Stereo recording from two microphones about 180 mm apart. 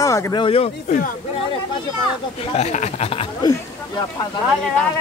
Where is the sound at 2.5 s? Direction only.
40° left (ahead or behind); by 4.3 s 20° left (ahead or behind).